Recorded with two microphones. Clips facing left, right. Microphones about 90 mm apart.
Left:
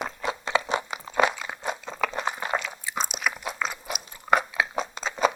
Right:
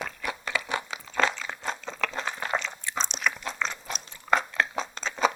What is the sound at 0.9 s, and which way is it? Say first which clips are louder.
Crunch: left 3 dB; 15° left (ahead or behind).